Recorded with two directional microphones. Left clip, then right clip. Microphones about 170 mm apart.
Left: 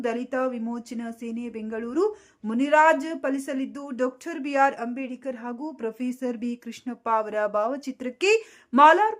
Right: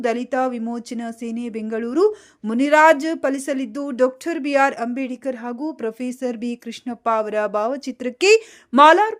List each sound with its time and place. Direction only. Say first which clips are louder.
0.0 s speech: right 6 dB; 25° right (ahead or behind)